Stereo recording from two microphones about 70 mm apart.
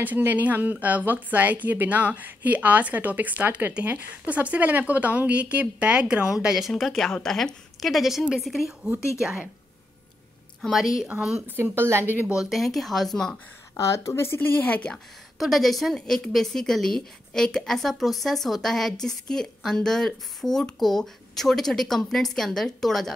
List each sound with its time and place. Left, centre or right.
0.0 s a woman's voice: right; by 8.7 s centre
10.6 s a woman's voice: centre
11.4 s speech: right
12.4 s a woman's voice: centre
13.7 s speech: left
15.3 s a woman's voice: centre